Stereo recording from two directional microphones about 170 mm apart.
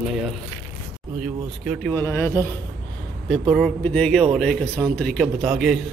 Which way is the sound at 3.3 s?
Centre (ahead or behind).